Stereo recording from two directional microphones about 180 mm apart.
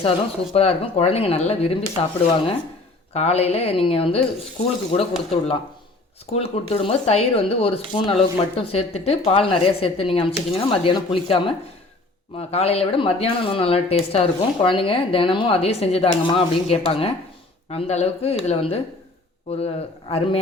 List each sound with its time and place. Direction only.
0.5 s speech: 35° left (ahead or behind)